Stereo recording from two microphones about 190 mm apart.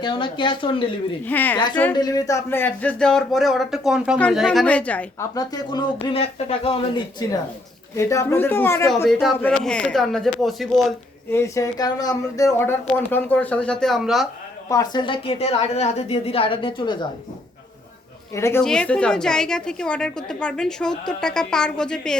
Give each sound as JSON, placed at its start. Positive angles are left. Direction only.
{"t": 0.0, "sound": "a woman's voice", "side_deg": 25}
{"t": 1.2, "sound": "speech", "side_deg": 10}
{"t": 1.5, "sound": "a woman's voice", "side_deg": 25}
{"t": 5.3, "sound": "a woman's voice", "side_deg": 20}
{"t": 7.9, "sound": "a woman's voice", "side_deg": 15}
{"t": 11.3, "sound": "speech", "side_deg": 15}
{"t": 14.7, "sound": "a woman's voice", "side_deg": 20}
{"t": 18.3, "sound": "speech", "side_deg": 15}
{"t": 18.6, "sound": "a woman's voice", "side_deg": 5}